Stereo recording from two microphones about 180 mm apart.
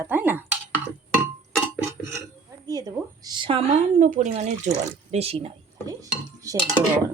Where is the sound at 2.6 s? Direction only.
20° right (ahead or behind).